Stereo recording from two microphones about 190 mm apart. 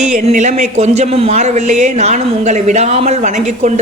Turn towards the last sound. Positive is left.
turn(degrees=-35)  # may be behind; listen again after turning